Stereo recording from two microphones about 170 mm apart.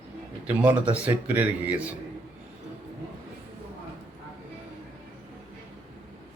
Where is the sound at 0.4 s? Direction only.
10° right (ahead or behind).